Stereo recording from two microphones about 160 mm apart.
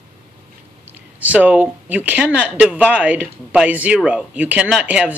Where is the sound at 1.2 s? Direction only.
10° right (ahead or behind).